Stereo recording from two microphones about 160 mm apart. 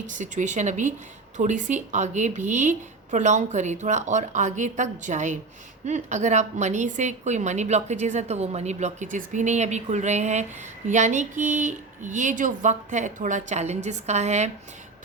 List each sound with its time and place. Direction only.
0.0 s a woman's voice: 50° right (ahead or behind)